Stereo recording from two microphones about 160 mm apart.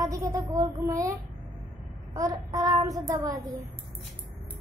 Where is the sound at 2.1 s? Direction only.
20° right (ahead or behind).